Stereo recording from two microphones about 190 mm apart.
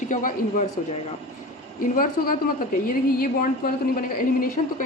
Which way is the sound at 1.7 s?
45° left (ahead or behind).